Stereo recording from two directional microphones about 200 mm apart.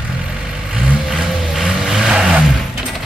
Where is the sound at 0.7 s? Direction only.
Centre (ahead or behind).